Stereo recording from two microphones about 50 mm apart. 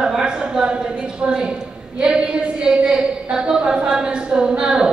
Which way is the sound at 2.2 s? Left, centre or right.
Right.